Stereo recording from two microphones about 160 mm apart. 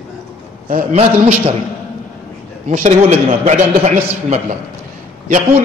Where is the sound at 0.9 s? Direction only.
40° right (ahead or behind).